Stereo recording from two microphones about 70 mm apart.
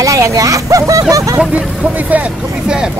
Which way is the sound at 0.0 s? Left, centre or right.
Right.